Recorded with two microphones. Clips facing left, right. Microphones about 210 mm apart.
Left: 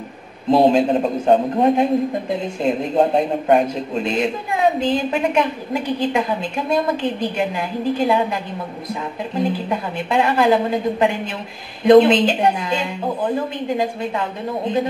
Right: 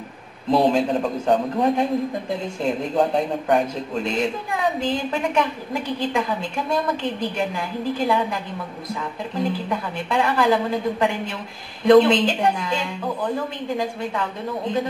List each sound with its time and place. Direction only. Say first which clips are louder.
0.5 s speech: left 4 dB; 25° left (ahead or behind)